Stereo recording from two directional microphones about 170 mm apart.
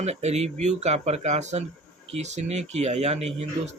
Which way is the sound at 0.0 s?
40° right (ahead or behind).